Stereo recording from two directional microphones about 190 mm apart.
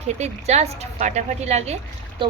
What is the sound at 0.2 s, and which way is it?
A woman's voice, 35° right (ahead or behind).